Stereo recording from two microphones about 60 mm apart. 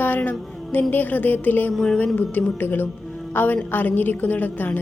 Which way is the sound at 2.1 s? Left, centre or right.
Left.